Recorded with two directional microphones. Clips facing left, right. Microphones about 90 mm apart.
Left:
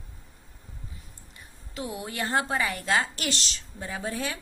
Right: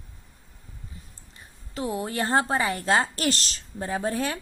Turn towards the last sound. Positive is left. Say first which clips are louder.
# right 5 dB
turn(degrees=-40)  # may be behind; listen again after turning